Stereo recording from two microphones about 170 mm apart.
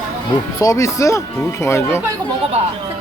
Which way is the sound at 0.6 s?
20° left (ahead or behind).